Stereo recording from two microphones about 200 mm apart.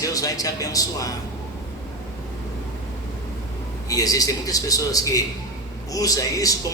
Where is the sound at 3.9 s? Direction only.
15° left (ahead or behind).